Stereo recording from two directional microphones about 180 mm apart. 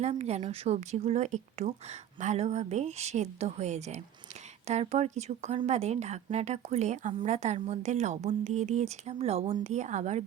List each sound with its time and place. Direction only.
0.0 s speech: 35° right (ahead or behind)